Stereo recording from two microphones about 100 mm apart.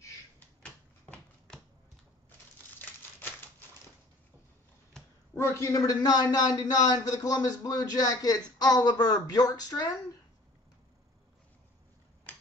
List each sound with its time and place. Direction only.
0.6 s finger snapping: 10° left (ahead or behind)
2.8 s typewriter: 20° left (ahead or behind)
5.3 s a man's voice: 30° left (ahead or behind)
12.3 s finger snapping: 15° left (ahead or behind)